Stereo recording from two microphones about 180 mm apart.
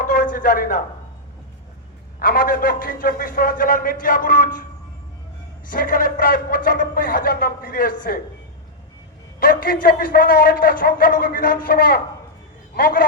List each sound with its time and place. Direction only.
0.0 s a sound: 50° left (ahead or behind)
2.1 s a man's voice: 55° left (ahead or behind)
5.6 s a man's voice: 50° left (ahead or behind)
9.4 s a man's voice: 50° left (ahead or behind)